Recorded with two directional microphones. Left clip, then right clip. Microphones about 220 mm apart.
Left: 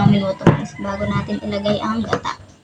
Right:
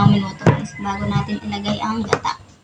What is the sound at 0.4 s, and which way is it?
Speech, 20° right (ahead or behind).